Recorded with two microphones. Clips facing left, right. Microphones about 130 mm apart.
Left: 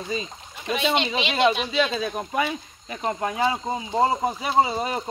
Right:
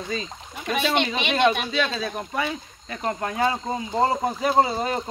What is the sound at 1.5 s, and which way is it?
Speech, 50° right (ahead or behind).